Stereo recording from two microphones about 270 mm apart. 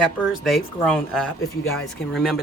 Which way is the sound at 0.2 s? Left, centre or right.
Centre.